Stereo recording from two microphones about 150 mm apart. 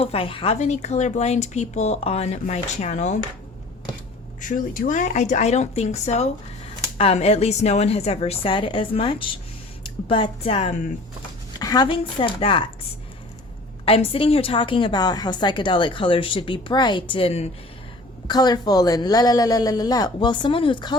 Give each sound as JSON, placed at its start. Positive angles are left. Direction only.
{"t": 0.0, "sound": "speech", "side_deg": 40}
{"t": 4.4, "sound": "speech", "side_deg": 60}
{"t": 11.6, "sound": "a woman's voice", "side_deg": 25}
{"t": 13.8, "sound": "a woman's voice", "side_deg": 40}
{"t": 18.3, "sound": "a woman's voice", "side_deg": 25}